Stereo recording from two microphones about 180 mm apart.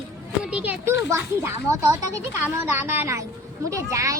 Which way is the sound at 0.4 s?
5° right (ahead or behind).